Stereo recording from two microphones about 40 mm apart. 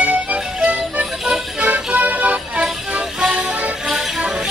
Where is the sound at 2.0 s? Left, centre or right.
Right.